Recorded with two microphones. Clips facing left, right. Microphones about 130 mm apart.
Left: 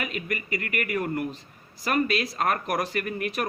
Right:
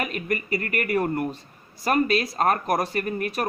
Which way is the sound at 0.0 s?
40° right (ahead or behind).